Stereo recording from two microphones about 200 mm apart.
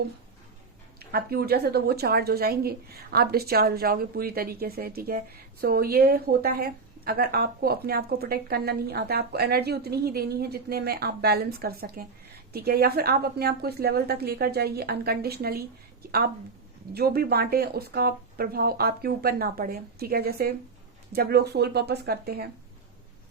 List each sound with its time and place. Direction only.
0.9 s a woman's voice: 50° right (ahead or behind)
16.9 s a woman's voice: 50° right (ahead or behind)